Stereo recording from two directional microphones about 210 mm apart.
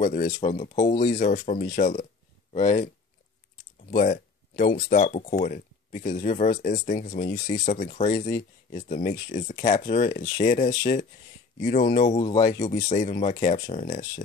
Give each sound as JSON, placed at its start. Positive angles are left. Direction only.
{"t": 0.0, "sound": "speech", "side_deg": 40}
{"t": 3.9, "sound": "speech", "side_deg": 40}